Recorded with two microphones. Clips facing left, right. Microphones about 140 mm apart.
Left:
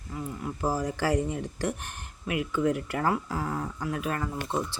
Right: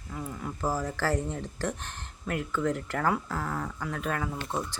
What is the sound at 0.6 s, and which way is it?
Speech, 15° left (ahead or behind).